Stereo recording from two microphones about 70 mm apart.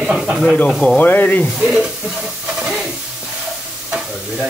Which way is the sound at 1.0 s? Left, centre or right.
Left.